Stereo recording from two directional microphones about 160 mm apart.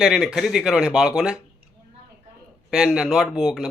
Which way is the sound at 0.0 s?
5° right (ahead or behind).